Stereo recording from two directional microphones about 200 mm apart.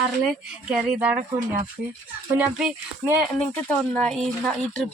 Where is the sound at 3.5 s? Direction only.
5° left (ahead or behind).